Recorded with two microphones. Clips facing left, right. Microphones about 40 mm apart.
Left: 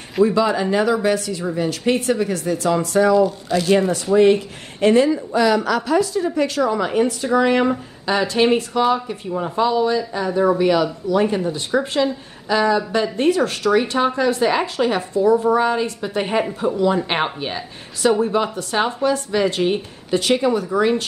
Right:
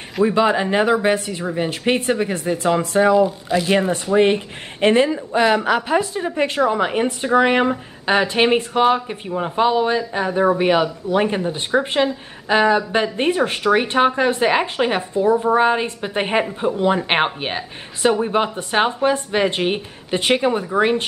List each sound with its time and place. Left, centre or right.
0.2 s speech: right